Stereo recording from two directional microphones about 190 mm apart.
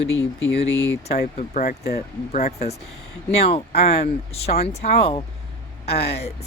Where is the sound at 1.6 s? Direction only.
55° left (ahead or behind).